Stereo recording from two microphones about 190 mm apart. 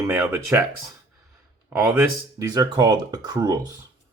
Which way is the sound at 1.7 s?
10° right (ahead or behind).